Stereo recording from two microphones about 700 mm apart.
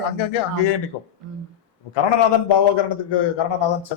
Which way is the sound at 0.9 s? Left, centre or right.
Left.